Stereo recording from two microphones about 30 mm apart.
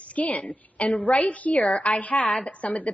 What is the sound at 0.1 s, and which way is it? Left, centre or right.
A woman's voice, left.